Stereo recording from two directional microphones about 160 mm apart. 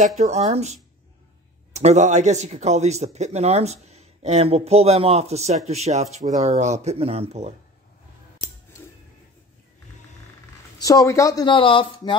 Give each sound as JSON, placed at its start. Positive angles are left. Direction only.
{"t": 0.2, "sound": "speech", "side_deg": -45}
{"t": 10.8, "sound": "speech", "side_deg": 20}